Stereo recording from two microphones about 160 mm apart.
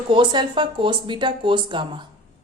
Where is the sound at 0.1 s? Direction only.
30° right (ahead or behind).